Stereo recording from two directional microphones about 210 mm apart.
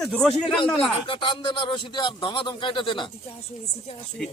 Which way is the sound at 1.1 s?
25° left (ahead or behind).